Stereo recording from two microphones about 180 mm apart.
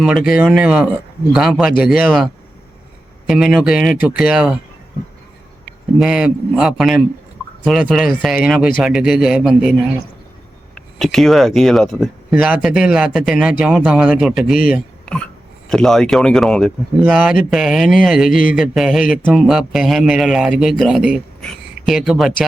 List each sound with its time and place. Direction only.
0.0 s a man's voice: centre (ahead or behind)
6.0 s a man's voice: centre (ahead or behind)
10.8 s a man's voice: centre (ahead or behind)
14.5 s speech: 50° left (ahead or behind)
15.7 s a man's voice: 5° left (ahead or behind)
18.3 s speech: 50° left (ahead or behind)
18.5 s a man's voice: centre (ahead or behind)